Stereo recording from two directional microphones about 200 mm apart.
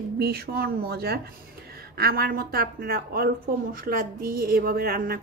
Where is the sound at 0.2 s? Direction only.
50° right (ahead or behind).